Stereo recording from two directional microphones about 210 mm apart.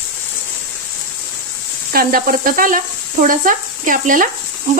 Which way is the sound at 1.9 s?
45° right (ahead or behind).